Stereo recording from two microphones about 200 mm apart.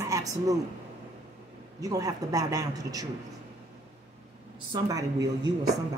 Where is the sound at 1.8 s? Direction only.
20° right (ahead or behind).